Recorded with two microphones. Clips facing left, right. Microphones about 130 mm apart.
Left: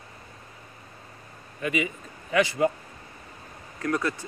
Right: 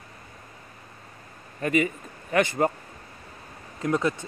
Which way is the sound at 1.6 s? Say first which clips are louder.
Right 4 dB; 45° right (ahead or behind).